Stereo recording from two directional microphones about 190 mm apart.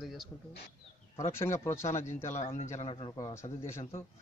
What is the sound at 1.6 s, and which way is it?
Speech, 15° left (ahead or behind).